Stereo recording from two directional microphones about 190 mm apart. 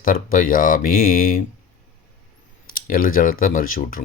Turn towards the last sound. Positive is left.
turn(degrees=45)  # may be behind; listen again after turning